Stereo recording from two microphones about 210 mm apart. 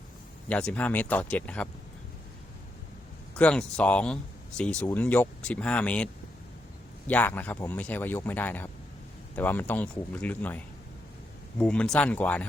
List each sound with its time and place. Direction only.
0.4 s speech: 5° left (ahead or behind)
3.3 s speech: 5° left (ahead or behind)
7.1 s speech: 10° left (ahead or behind)
11.6 s speech: 5° left (ahead or behind)